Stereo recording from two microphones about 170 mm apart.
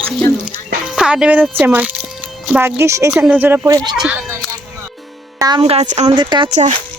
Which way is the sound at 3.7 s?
25° right (ahead or behind).